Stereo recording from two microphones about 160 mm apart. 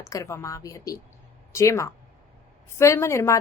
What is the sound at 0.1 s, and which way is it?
A woman's voice, 20° left (ahead or behind).